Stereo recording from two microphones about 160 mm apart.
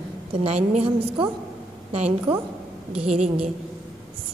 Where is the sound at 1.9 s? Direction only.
45° right (ahead or behind).